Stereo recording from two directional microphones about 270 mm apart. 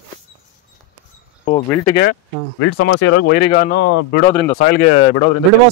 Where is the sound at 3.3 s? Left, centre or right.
Left.